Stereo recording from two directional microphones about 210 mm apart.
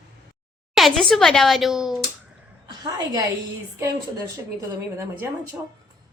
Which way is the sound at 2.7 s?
20° right (ahead or behind).